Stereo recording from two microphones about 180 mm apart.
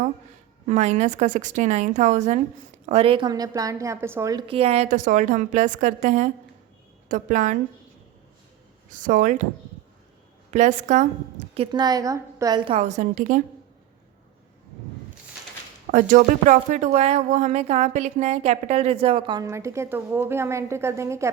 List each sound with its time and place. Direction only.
0.7 s a woman's voice: 40° right (ahead or behind)
8.9 s speech: 45° right (ahead or behind)
10.5 s speech: 40° right (ahead or behind)
11.5 s a woman's voice: 30° right (ahead or behind); by 13.4 s 45° right (ahead or behind)
15.9 s a woman's voice: 45° right (ahead or behind); by 21.2 s 15° right (ahead or behind)